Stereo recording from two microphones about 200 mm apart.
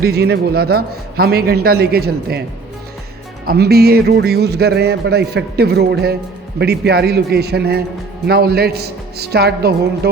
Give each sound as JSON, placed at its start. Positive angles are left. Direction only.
{"t": 0.0, "sound": "a man's voice", "side_deg": -50}
{"t": 3.4, "sound": "a man's voice", "side_deg": -50}